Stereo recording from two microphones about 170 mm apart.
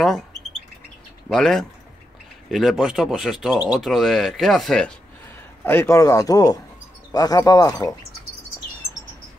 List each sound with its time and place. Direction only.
1.3 s speech: 5° left (ahead or behind); by 7.9 s 20° left (ahead or behind)